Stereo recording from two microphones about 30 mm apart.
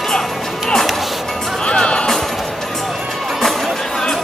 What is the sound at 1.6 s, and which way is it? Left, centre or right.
Music, left.